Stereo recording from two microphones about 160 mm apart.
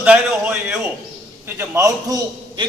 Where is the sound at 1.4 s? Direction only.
20° right (ahead or behind).